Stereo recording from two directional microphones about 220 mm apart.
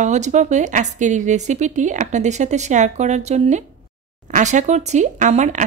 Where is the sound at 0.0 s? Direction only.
30° right (ahead or behind).